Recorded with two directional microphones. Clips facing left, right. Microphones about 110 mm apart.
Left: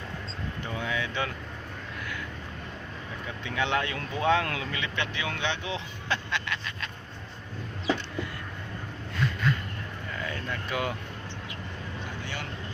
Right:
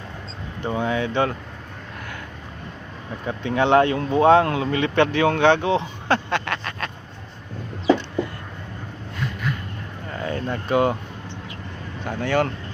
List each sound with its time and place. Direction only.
0.6 s speech: 40° right (ahead or behind)
3.2 s speech: 45° right (ahead or behind); by 5.7 s 60° right (ahead or behind)
5.7 s a sound: 50° right (ahead or behind)
10.1 s vehicle: 40° right (ahead or behind)
12.0 s speech: 65° right (ahead or behind)